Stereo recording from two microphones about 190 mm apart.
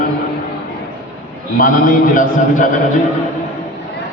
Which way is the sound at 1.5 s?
45° left (ahead or behind).